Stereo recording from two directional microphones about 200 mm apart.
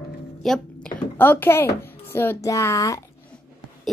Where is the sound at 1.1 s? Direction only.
10° left (ahead or behind).